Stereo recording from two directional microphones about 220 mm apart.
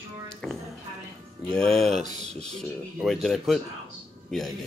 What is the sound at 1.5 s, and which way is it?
Speech, centre (ahead or behind).